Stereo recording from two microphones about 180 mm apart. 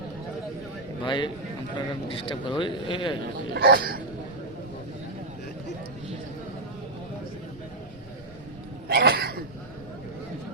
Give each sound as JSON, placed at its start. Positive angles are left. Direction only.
{"t": 1.0, "sound": "speech", "side_deg": 25}
{"t": 3.5, "sound": "speech", "side_deg": -55}
{"t": 8.9, "sound": "cough", "side_deg": -55}